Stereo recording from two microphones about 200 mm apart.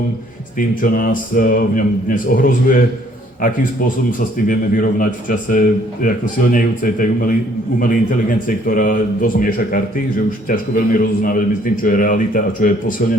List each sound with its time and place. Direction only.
0.8 s a man's voice: 45° left (ahead or behind)
4.2 s a man's voice: 40° left (ahead or behind)